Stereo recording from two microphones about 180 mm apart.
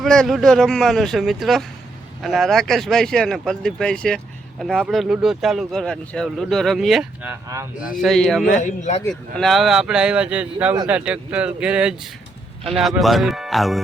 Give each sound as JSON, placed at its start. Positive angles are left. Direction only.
{"t": 0.0, "sound": "speech", "side_deg": 0}
{"t": 7.4, "sound": "speech", "side_deg": -15}
{"t": 7.9, "sound": "speech", "side_deg": 0}
{"t": 8.6, "sound": "speech", "side_deg": 40}
{"t": 9.0, "sound": "speech", "side_deg": 0}